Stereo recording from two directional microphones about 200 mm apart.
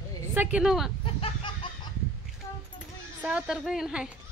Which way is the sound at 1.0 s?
25° left (ahead or behind).